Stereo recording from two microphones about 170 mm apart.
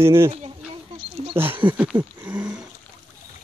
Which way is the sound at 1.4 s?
15° right (ahead or behind).